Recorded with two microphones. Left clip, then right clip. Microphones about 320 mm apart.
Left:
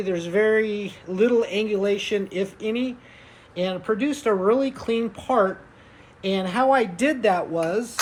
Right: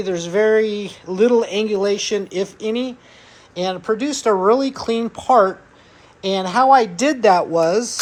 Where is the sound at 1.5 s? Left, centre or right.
Centre.